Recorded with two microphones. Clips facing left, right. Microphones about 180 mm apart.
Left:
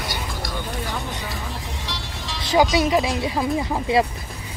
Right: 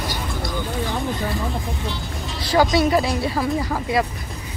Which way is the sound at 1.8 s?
90° left.